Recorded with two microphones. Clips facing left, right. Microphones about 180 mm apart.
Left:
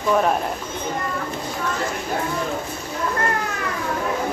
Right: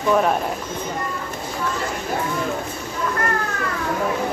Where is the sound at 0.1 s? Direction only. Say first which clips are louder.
Right 1 dB; centre (ahead or behind).